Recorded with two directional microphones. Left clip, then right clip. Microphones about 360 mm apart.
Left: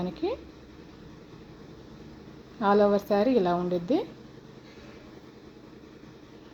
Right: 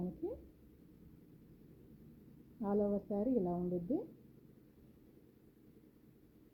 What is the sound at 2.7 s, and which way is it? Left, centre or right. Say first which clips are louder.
Speech: left 14 dB; centre.